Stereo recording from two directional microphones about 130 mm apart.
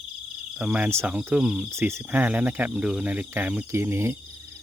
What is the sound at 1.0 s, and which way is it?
Speech, 10° right (ahead or behind).